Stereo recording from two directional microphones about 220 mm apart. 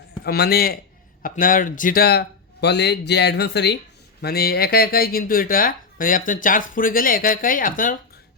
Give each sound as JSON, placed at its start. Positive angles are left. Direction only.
{"t": 0.3, "sound": "speech", "side_deg": 45}